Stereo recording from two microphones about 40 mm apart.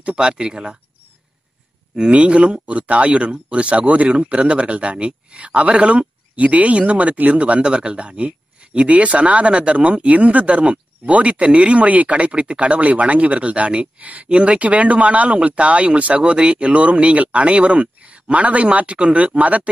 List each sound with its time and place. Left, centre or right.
0.0 s speech: right
2.1 s speech: right